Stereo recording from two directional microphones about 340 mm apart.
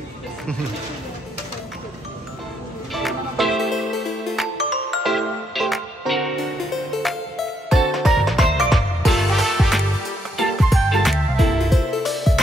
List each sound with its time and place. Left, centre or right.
2.9 s music: centre